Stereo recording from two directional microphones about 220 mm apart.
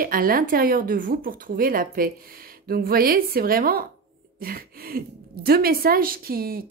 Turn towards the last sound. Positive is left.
turn(degrees=-40)  # may be behind; listen again after turning